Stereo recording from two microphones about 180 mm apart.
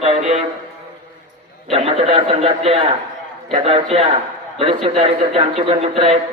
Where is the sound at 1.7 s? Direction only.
35° right (ahead or behind).